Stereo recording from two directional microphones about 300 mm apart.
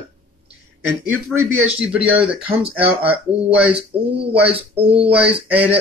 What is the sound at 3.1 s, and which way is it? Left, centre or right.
Speech, centre.